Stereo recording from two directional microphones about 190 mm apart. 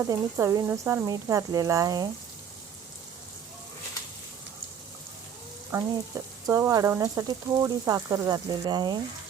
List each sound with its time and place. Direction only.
0.0 s speech: 15° right (ahead or behind)
5.7 s speech: 15° right (ahead or behind)